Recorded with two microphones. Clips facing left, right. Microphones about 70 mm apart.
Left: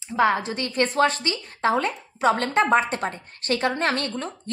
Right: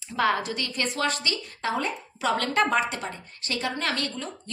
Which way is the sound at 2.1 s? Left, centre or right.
Left.